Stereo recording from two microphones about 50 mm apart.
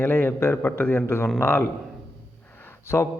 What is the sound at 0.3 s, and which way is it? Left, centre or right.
Speech, left.